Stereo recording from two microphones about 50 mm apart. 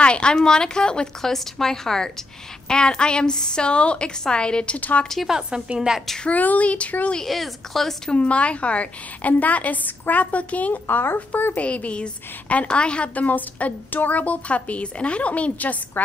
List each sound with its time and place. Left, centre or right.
0.0 s a woman's voice: centre
4.7 s speech: left
5.8 s a woman's voice: centre
6.2 s speech: left
7.2 s a woman's voice: centre
8.1 s a woman's voice: left
10.7 s a woman's voice: left